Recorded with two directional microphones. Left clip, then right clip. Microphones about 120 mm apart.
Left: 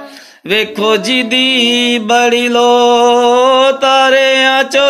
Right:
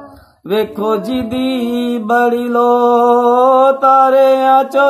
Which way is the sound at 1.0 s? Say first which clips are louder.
Left 7 dB; 30° left (ahead or behind).